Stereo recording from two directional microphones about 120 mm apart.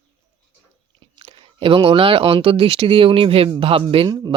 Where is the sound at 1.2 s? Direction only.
50° right (ahead or behind).